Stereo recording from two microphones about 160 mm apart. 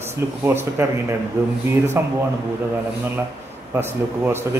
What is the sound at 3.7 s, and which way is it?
Speech, 15° right (ahead or behind).